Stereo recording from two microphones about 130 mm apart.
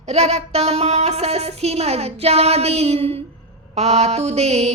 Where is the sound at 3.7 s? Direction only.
55° right (ahead or behind).